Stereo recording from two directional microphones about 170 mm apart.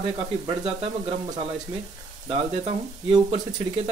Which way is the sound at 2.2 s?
25° right (ahead or behind).